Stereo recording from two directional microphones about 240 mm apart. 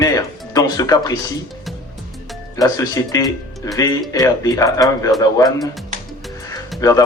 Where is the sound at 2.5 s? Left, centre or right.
Centre.